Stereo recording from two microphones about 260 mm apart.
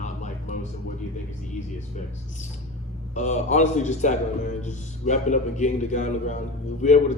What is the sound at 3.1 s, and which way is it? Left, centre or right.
A man's voice, left.